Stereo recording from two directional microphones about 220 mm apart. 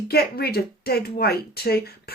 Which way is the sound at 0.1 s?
45° left (ahead or behind).